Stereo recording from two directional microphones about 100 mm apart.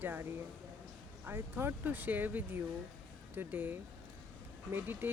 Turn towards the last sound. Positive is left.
turn(degrees=-20)  # may be behind; listen again after turning